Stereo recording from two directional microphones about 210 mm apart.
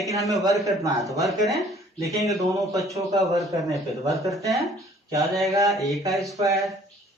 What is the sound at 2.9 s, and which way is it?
A man's voice, 15° right (ahead or behind).